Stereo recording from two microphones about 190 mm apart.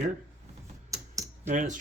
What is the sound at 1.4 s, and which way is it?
Speech, 40° right (ahead or behind).